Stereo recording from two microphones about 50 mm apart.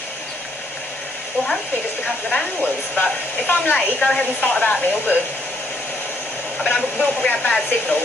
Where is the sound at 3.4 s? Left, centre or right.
Left.